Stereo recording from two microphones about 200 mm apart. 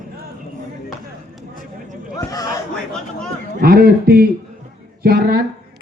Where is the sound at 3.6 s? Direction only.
50° right (ahead or behind).